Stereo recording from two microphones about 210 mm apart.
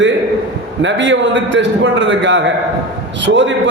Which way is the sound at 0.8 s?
60° right (ahead or behind).